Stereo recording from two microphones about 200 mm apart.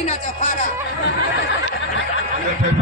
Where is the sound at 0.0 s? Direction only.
35° left (ahead or behind).